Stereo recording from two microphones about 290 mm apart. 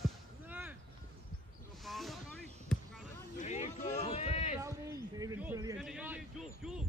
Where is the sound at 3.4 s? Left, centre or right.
Left.